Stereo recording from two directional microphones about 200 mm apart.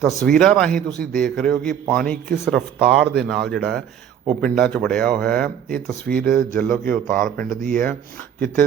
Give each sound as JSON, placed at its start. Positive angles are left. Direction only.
{"t": 0.0, "sound": "a man's voice", "side_deg": 5}
{"t": 5.7, "sound": "speech", "side_deg": -45}
{"t": 6.6, "sound": "a man's voice", "side_deg": 5}
{"t": 7.5, "sound": "speech", "side_deg": -40}